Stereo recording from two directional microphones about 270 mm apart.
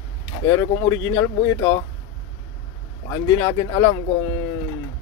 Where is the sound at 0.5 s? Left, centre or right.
Centre.